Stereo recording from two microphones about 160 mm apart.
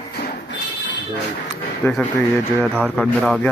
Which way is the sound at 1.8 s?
15° left (ahead or behind).